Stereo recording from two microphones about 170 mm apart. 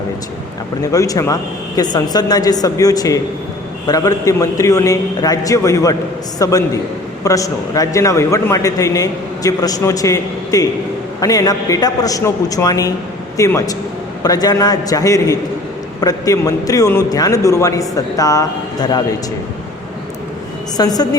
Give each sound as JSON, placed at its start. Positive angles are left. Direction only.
{"t": 0.8, "sound": "a man's voice", "side_deg": 20}
{"t": 20.7, "sound": "a man's voice", "side_deg": 20}